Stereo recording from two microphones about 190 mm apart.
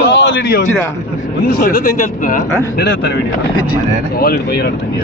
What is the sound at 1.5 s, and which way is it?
Speech, 50° left (ahead or behind).